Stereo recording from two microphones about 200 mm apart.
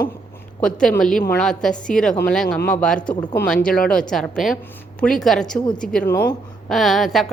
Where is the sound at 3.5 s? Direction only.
5° left (ahead or behind).